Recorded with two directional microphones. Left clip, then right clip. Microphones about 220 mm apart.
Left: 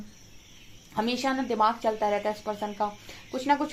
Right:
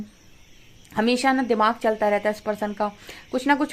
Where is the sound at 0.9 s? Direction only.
40° right (ahead or behind).